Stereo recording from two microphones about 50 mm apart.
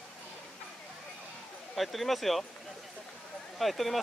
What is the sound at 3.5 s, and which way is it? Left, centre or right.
Speech, centre.